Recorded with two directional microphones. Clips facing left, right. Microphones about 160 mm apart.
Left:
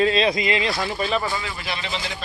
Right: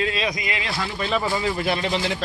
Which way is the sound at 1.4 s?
50° right (ahead or behind).